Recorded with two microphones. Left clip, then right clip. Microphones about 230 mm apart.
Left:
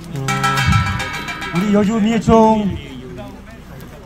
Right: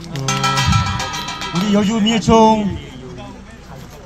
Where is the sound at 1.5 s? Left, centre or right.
Left.